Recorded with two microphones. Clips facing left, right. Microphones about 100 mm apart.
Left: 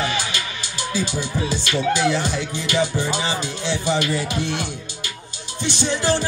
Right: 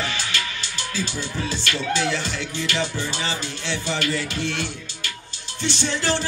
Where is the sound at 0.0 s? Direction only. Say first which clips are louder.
Left 3 dB; 20° left (ahead or behind).